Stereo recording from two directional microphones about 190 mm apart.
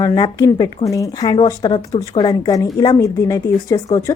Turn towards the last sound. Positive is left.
turn(degrees=20)  # may be behind; listen again after turning